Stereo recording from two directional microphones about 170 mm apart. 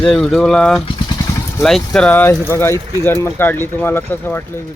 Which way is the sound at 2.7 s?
30° right (ahead or behind).